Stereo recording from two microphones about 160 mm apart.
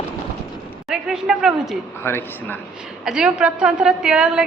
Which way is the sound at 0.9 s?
5° right (ahead or behind).